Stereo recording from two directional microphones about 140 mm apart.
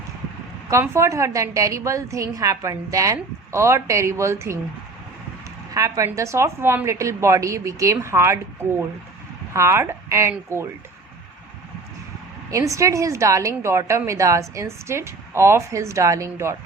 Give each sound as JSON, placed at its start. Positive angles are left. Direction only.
{"t": 0.7, "sound": "a woman's voice", "side_deg": -20}
{"t": 5.7, "sound": "a woman's voice", "side_deg": -25}
{"t": 9.5, "sound": "a woman's voice", "side_deg": -20}
{"t": 12.5, "sound": "a woman's voice", "side_deg": -20}